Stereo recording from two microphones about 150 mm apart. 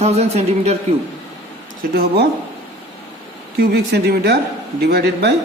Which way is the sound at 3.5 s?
90° right.